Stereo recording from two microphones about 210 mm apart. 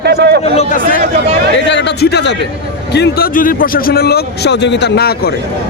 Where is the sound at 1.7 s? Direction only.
55° left (ahead or behind).